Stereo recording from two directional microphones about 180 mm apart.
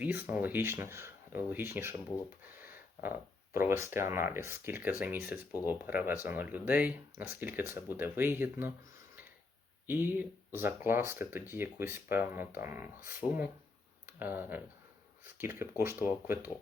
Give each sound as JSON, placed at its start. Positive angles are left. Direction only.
{"t": 0.0, "sound": "speech", "side_deg": -10}
{"t": 3.5, "sound": "speech", "side_deg": -15}
{"t": 9.8, "sound": "speech", "side_deg": -10}